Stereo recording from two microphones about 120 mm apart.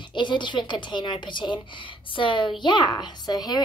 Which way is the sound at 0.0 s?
40° left (ahead or behind).